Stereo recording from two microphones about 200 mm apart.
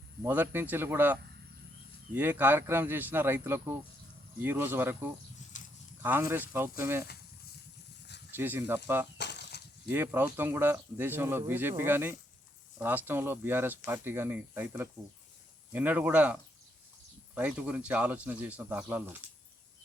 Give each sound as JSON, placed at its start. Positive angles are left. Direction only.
{"t": 0.2, "sound": "speech", "side_deg": -10}
{"t": 5.5, "sound": "livestock", "side_deg": 40}
{"t": 6.0, "sound": "speech", "side_deg": -10}
{"t": 8.4, "sound": "speech", "side_deg": -10}
{"t": 9.1, "sound": "a sound", "side_deg": 60}
{"t": 9.9, "sound": "speech", "side_deg": -10}